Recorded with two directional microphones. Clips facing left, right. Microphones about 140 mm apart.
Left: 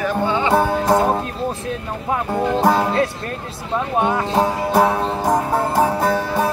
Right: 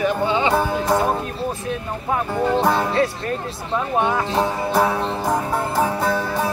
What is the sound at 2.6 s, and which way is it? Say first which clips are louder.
Speech: left 3 dB; 40° left (ahead or behind).